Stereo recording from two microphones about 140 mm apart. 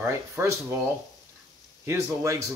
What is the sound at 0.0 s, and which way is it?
Speech, 20° right (ahead or behind).